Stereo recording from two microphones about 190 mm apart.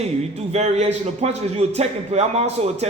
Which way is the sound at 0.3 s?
35° right (ahead or behind).